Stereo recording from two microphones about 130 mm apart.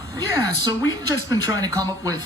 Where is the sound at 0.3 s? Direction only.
30° right (ahead or behind).